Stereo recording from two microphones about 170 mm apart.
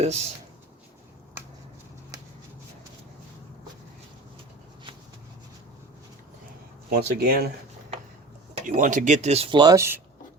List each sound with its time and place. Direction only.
0.0 s speech: 40° right (ahead or behind)
6.9 s speech: 65° right (ahead or behind)
8.6 s speech: 50° right (ahead or behind); by 10.0 s 15° right (ahead or behind)